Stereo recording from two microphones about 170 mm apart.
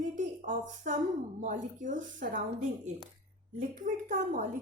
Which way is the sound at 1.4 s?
50° right (ahead or behind).